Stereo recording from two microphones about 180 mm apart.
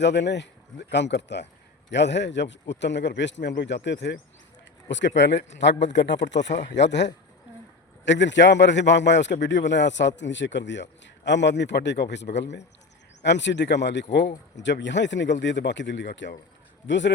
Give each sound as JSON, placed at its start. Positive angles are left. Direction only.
{"t": 0.0, "sound": "speech", "side_deg": 75}